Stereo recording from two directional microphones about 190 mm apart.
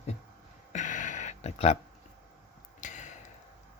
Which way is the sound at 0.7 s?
40° left (ahead or behind).